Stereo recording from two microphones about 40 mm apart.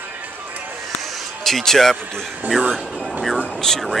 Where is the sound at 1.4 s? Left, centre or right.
Centre.